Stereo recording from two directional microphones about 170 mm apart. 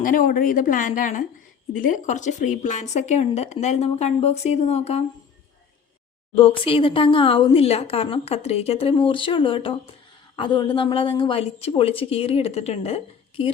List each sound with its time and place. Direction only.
0.0 s a woman's voice: 50° left (ahead or behind)
6.3 s speech: 30° left (ahead or behind)